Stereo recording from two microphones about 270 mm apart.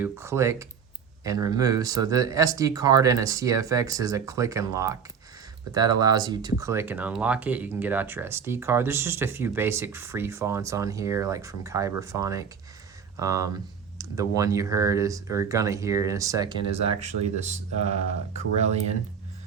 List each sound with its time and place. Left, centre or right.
0.0 s speech: centre